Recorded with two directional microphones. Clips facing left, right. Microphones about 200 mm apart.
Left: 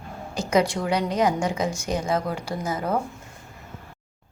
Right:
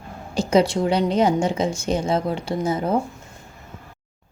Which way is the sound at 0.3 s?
25° right (ahead or behind).